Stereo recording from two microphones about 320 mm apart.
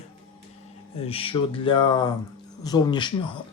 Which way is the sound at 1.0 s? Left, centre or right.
Centre.